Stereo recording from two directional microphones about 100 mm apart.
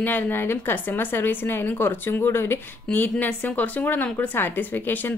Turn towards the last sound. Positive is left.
turn(degrees=20)  # may be behind; listen again after turning